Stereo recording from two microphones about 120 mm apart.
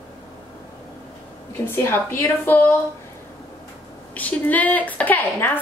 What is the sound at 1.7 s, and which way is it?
A woman's voice, 20° left (ahead or behind).